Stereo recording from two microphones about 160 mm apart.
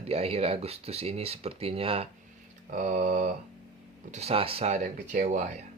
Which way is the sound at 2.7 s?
50° right (ahead or behind).